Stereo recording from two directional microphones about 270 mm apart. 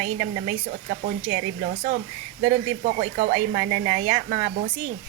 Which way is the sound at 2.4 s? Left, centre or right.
Right.